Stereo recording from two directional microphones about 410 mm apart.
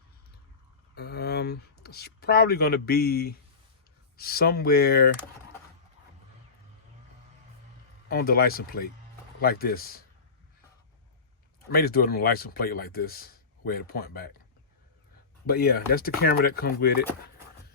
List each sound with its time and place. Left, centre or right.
0.9 s speech: left
8.1 s speech: left
11.7 s speech: left
15.4 s speech: left